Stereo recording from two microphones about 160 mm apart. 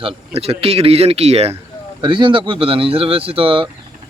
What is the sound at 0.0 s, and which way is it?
Speech, 40° right (ahead or behind).